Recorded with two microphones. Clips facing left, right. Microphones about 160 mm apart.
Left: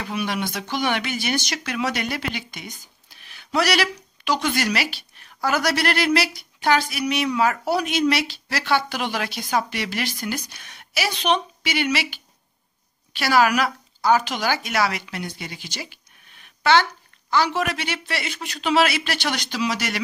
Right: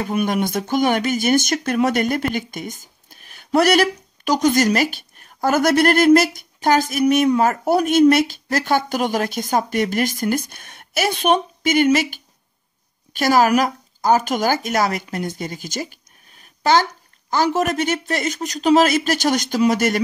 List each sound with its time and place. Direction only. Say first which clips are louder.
0.0 s speech: right 6 dB; 45° right (ahead or behind)